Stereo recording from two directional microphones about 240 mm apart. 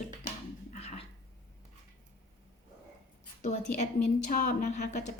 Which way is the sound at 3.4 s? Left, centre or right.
Left.